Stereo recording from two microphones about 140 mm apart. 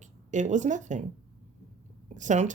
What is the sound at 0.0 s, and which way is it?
Speech, 60° right (ahead or behind).